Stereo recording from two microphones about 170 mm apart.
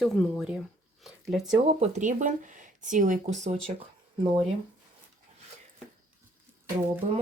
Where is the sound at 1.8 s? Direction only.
45° right (ahead or behind).